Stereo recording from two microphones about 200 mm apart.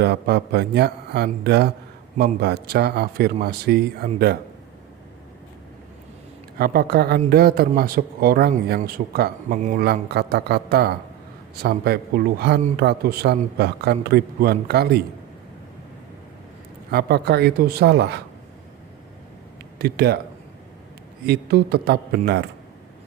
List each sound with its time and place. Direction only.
0.0 s a man's voice: 55° right (ahead or behind)
6.6 s speech: 50° right (ahead or behind)
16.9 s speech: 50° right (ahead or behind)
19.8 s speech: 55° right (ahead or behind)
21.2 s speech: 50° right (ahead or behind)